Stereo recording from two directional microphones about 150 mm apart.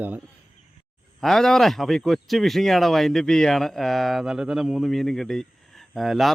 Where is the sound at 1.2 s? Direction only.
5° left (ahead or behind).